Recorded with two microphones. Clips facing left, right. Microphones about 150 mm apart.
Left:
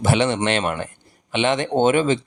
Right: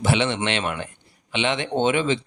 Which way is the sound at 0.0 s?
45° left (ahead or behind).